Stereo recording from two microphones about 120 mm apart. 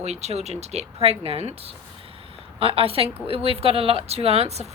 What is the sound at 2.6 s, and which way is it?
A woman's voice, 50° right (ahead or behind).